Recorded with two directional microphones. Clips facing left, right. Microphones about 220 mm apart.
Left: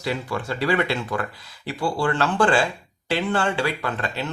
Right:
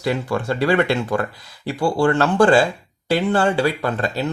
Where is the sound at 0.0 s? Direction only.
50° right (ahead or behind).